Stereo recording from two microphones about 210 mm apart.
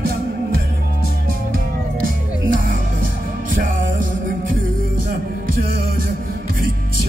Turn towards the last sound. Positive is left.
turn(degrees=-40)  # may be behind; listen again after turning